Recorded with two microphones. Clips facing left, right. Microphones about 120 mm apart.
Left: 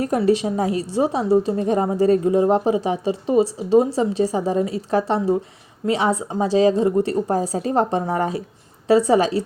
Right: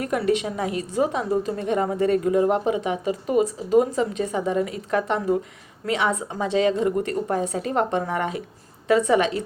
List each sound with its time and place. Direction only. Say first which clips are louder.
0.0 s a woman's voice: left 4 dB; 35° left (ahead or behind)